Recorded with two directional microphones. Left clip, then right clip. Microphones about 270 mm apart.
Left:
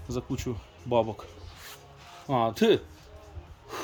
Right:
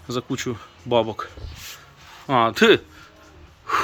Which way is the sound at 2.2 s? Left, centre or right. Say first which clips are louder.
Right 8 dB; centre.